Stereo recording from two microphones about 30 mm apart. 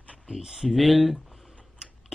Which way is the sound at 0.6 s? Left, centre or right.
Centre.